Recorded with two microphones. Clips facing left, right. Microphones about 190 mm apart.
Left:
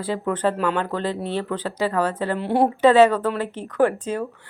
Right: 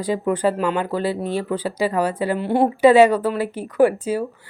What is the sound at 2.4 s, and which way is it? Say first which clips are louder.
Speech: right 1 dB; centre (ahead or behind).